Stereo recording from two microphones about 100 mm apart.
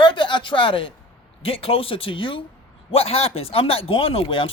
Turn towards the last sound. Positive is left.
turn(degrees=65)  # may be behind; listen again after turning